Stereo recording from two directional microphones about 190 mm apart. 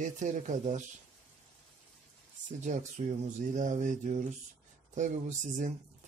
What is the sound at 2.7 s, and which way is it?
Speech, 40° right (ahead or behind).